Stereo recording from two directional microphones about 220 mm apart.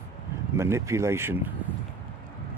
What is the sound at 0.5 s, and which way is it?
Speech, 10° right (ahead or behind).